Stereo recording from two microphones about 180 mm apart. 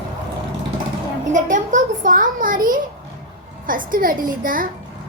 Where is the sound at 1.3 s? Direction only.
45° right (ahead or behind).